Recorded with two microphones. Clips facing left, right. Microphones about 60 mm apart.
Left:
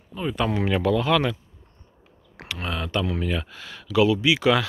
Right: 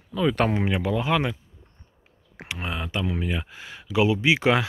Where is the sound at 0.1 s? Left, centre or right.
Right.